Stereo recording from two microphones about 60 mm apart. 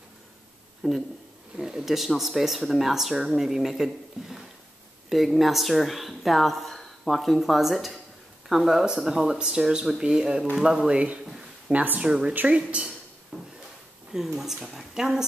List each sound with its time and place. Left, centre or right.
0.8 s speech: centre
1.6 s speech: centre
11.2 s a sound: centre
11.7 s speech: right
12.0 s speech: centre
13.3 s drawer open or close: centre
14.1 s speech: centre